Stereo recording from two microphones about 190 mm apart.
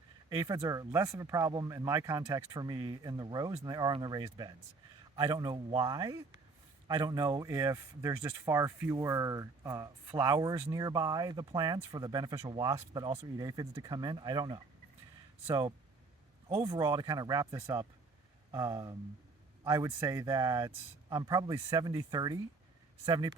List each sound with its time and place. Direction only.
0.3 s a man's voice: 20° right (ahead or behind)